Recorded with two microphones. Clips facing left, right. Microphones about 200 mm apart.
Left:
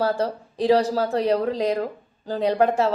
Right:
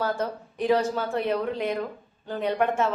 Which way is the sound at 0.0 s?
30° left (ahead or behind).